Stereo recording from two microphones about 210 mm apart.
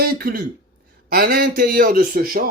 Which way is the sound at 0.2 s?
45° right (ahead or behind).